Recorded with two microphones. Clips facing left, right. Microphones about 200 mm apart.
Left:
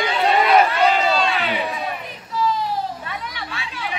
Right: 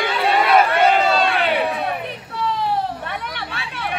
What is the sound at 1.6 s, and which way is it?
Children playing, 60° right (ahead or behind).